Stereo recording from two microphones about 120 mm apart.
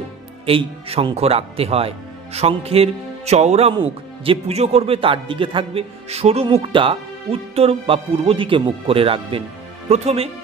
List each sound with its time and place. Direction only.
0.5 s speech: 50° right (ahead or behind)
3.7 s speech: 50° right (ahead or behind)
9.8 s speech: 60° right (ahead or behind)